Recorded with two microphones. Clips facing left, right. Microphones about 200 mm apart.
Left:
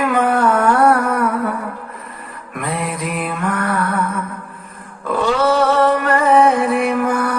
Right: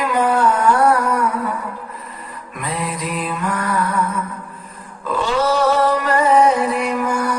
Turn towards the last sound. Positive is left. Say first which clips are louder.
# left 3 dB
turn(degrees=55)  # may be behind; listen again after turning